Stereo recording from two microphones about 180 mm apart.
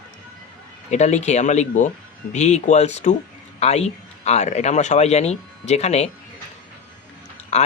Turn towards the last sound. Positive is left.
turn(degrees=40)  # may be behind; listen again after turning